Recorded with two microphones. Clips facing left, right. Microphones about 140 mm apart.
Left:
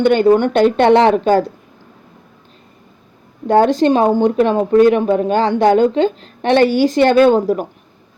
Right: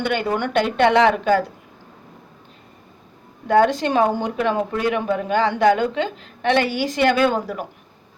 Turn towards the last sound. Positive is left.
turn(degrees=35)  # may be behind; listen again after turning